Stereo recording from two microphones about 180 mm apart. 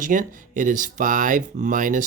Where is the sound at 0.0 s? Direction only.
45° right (ahead or behind).